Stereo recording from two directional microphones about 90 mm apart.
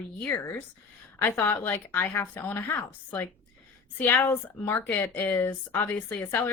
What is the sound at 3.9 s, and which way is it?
Speech, 25° left (ahead or behind).